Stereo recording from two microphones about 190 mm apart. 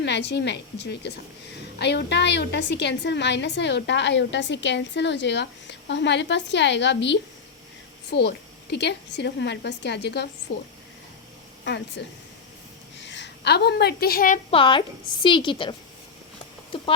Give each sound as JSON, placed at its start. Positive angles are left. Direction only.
{"t": 0.0, "sound": "a woman's voice", "side_deg": 65}
{"t": 13.1, "sound": "a woman's voice", "side_deg": 65}
{"t": 14.5, "sound": "a woman's voice", "side_deg": 25}
{"t": 16.7, "sound": "speech", "side_deg": 30}